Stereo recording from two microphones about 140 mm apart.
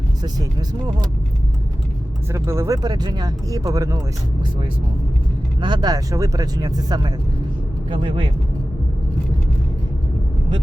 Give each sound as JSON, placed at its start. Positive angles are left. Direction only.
{"t": 2.3, "sound": "speech", "side_deg": -20}
{"t": 5.5, "sound": "speech", "side_deg": -30}
{"t": 7.9, "sound": "speech", "side_deg": -40}